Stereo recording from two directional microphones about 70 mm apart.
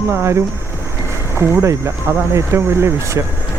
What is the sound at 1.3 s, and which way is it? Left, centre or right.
Speech, right.